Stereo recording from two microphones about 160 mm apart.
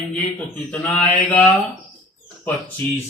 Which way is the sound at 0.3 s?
10° left (ahead or behind).